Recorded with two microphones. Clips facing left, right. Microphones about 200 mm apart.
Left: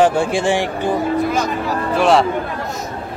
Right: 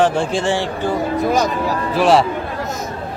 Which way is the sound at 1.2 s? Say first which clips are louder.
Right 2 dB; 45° right (ahead or behind).